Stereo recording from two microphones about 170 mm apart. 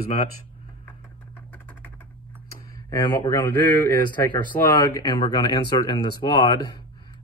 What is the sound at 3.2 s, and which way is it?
Speech, 10° left (ahead or behind).